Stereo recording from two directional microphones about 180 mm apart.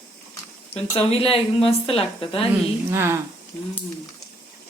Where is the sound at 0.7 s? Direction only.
35° left (ahead or behind).